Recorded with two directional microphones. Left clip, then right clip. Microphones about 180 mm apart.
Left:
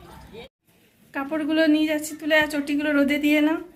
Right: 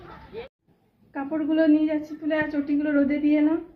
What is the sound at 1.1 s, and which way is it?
A woman's voice, 25° left (ahead or behind).